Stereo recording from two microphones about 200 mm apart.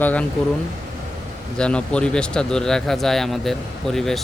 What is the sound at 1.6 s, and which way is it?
Speech, 5° left (ahead or behind).